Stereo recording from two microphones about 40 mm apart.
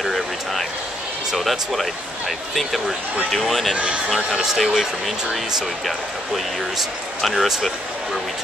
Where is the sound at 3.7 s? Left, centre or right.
Right.